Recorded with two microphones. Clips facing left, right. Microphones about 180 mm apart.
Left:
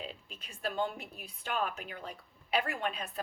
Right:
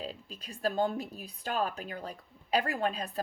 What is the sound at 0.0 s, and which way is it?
Speech, 35° right (ahead or behind).